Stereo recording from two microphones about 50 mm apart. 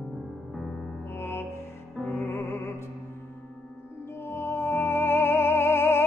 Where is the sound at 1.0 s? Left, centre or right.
Left.